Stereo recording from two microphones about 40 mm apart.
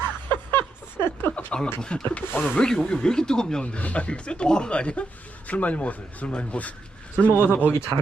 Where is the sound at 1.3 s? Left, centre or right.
Left.